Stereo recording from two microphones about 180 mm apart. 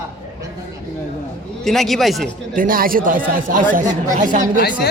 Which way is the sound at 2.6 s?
50° right (ahead or behind).